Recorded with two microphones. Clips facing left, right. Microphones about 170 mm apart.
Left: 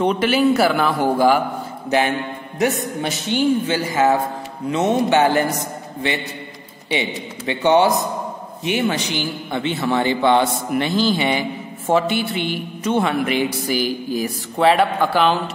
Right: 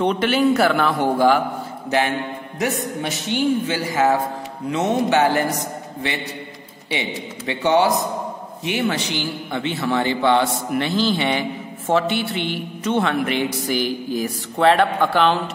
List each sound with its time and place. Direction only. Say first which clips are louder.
0.0 s a man's voice: left 1 dB; 5° left (ahead or behind)
2.6 s a man's voice: left 3 dB; 30° left (ahead or behind)
6.9 s a man's voice: left 3 dB; 20° left (ahead or behind); by 15.4 s 5° left (ahead or behind)